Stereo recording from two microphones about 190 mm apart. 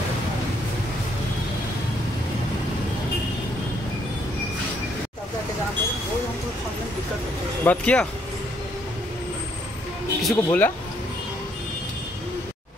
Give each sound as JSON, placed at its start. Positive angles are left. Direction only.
{"t": 7.6, "sound": "speech", "side_deg": 5}
{"t": 10.2, "sound": "speech", "side_deg": 10}